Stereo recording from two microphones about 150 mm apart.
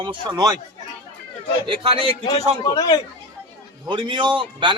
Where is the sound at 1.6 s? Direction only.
40° right (ahead or behind).